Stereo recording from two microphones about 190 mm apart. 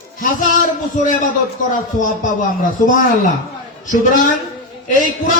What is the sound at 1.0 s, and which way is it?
Speech, 45° left (ahead or behind).